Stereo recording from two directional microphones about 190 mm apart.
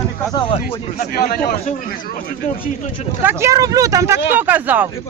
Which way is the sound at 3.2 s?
10° right (ahead or behind).